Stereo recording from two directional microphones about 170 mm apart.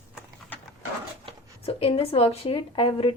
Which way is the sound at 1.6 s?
35° left (ahead or behind).